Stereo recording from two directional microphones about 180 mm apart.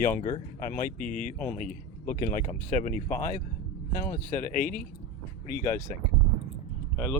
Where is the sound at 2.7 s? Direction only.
45° left (ahead or behind).